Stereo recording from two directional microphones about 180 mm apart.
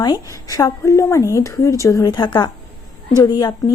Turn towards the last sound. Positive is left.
turn(degrees=20)  # may be behind; listen again after turning